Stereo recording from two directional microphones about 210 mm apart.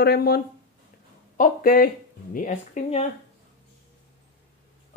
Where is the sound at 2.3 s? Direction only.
35° left (ahead or behind).